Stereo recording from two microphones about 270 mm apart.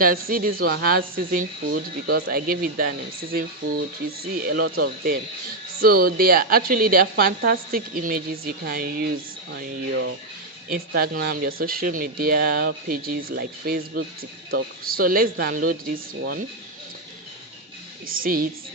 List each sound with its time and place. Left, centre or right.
0.0 s a woman's voice: right
5.8 s a woman's voice: right
18.2 s a woman's voice: right